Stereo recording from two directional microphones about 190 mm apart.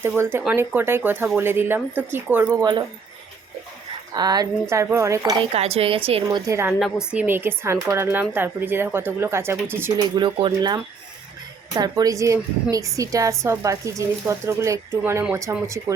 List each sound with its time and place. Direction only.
0.0 s speech: 10° right (ahead or behind)
4.1 s speech: 20° right (ahead or behind)
5.5 s a woman's voice: 30° right (ahead or behind)
6.2 s speech: 20° right (ahead or behind)
6.7 s speech: 5° right (ahead or behind)
10.2 s speech: 25° right (ahead or behind)